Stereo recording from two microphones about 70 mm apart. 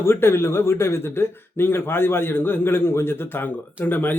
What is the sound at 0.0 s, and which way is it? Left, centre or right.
A man's voice, left.